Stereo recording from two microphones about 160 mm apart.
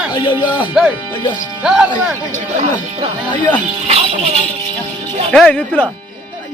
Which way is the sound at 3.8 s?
40° right (ahead or behind).